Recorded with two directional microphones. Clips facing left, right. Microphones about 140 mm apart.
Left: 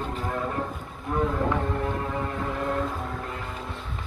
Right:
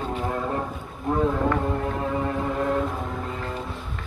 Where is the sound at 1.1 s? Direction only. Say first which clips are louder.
Right 3 dB; 25° right (ahead or behind).